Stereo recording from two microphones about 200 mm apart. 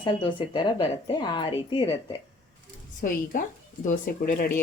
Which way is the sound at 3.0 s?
45° left (ahead or behind).